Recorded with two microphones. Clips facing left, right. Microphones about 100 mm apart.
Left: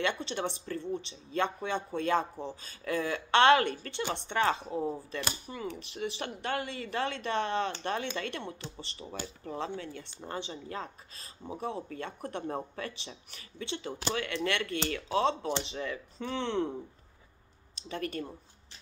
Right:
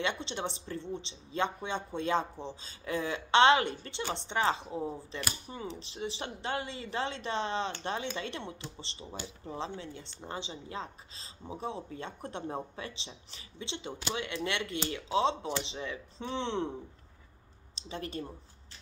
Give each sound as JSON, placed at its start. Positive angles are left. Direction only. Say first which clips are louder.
{"t": 0.0, "sound": "speech", "louder": "left 2 dB", "side_deg": -20}
{"t": 17.7, "sound": "speech", "louder": "left 3 dB", "side_deg": -20}